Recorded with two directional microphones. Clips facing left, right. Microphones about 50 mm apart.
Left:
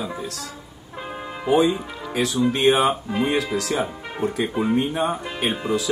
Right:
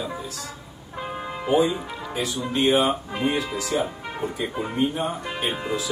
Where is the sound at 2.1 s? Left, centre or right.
Left.